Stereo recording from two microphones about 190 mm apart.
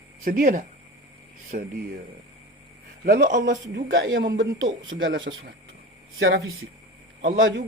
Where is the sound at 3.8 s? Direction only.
60° right (ahead or behind).